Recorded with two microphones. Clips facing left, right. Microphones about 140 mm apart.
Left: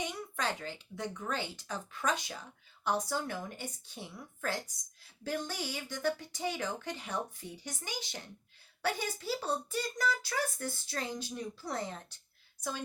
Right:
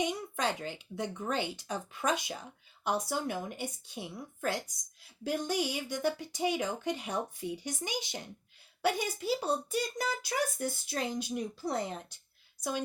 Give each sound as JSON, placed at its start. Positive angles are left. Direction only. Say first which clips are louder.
{"t": 0.0, "sound": "speech", "louder": "right 4 dB", "side_deg": -20}